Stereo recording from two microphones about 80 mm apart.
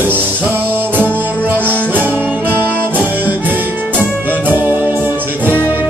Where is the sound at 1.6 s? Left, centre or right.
Right.